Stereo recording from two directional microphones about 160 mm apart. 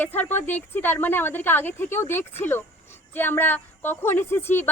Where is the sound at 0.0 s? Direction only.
10° left (ahead or behind).